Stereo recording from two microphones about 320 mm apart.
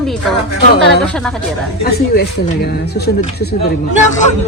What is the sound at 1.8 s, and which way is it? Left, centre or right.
Speech, left.